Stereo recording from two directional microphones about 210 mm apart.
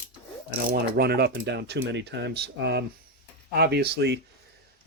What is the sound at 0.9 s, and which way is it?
Speech, 50° right (ahead or behind).